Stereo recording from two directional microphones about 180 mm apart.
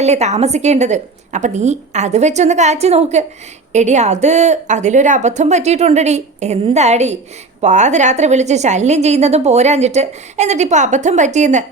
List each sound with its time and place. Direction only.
0.0 s a woman's voice: 40° right (ahead or behind)